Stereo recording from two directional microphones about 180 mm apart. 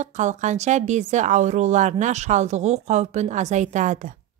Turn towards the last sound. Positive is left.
turn(degrees=-45)  # may be behind; listen again after turning